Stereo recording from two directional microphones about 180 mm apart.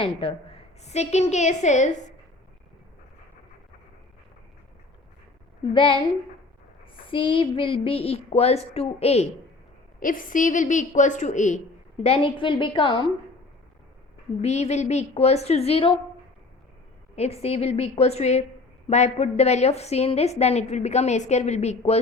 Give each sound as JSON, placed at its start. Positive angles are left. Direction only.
{"t": 0.0, "sound": "a woman's voice", "side_deg": 30}
{"t": 5.7, "sound": "a woman's voice", "side_deg": 30}
{"t": 7.1, "sound": "a woman's voice", "side_deg": 30}
{"t": 10.0, "sound": "a woman's voice", "side_deg": 50}
{"t": 12.0, "sound": "a woman's voice", "side_deg": 30}
{"t": 14.4, "sound": "a woman's voice", "side_deg": 40}
{"t": 17.2, "sound": "a woman's voice", "side_deg": 35}